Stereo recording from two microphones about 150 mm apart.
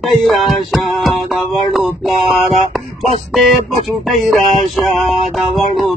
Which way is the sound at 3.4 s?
Centre (ahead or behind).